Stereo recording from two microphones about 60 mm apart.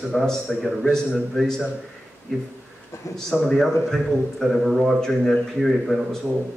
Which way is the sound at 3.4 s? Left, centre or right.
Centre.